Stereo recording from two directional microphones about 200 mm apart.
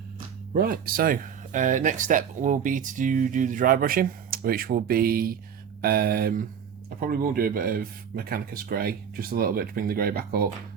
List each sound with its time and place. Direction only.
0.5 s speech: 45° right (ahead or behind)